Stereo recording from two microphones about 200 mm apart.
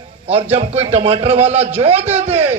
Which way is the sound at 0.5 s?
30° right (ahead or behind).